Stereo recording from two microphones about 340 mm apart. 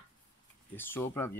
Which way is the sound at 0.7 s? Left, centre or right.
Centre.